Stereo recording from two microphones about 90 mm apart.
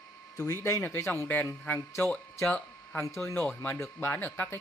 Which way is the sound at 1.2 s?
20° left (ahead or behind).